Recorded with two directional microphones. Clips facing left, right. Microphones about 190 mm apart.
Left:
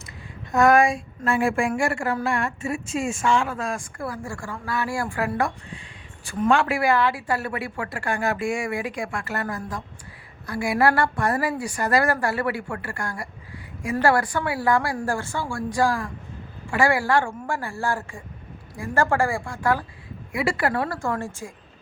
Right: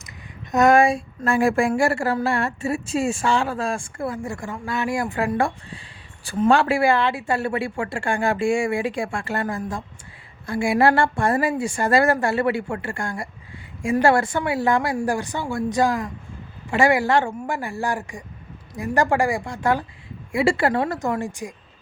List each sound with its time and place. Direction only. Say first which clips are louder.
0.5 s a woman's voice: right 2 dB; 25° right (ahead or behind)